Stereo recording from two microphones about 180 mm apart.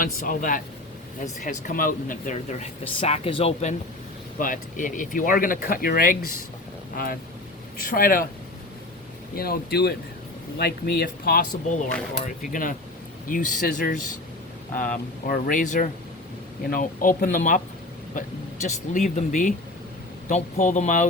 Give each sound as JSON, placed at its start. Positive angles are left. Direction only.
{"t": 0.0, "sound": "speech", "side_deg": 50}
{"t": 4.4, "sound": "speech", "side_deg": 45}
{"t": 9.3, "sound": "speech", "side_deg": 55}